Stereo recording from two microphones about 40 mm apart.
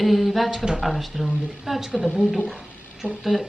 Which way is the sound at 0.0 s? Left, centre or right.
Centre.